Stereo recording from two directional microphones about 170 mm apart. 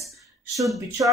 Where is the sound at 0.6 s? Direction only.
Centre (ahead or behind).